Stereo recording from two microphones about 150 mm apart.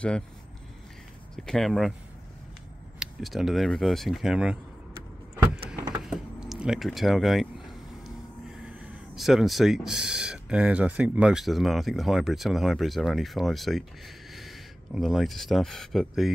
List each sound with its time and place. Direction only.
1.3 s speech: 5° left (ahead or behind)
3.0 s speech: centre (ahead or behind)
6.0 s vehicle: 5° right (ahead or behind)
8.6 s speech: 5° right (ahead or behind)